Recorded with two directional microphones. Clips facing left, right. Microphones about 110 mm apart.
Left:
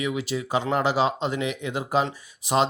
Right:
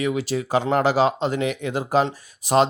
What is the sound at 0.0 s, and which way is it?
Speech, 40° right (ahead or behind).